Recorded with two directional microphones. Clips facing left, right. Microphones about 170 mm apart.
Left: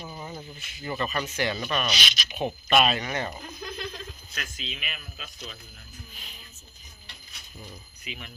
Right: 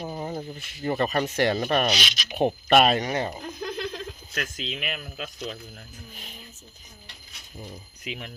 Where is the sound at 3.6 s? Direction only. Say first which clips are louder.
Right 5 dB; 70° right (ahead or behind); by 6.4 s 50° right (ahead or behind).